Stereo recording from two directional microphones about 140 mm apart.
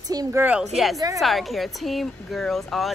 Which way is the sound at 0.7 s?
Centre (ahead or behind).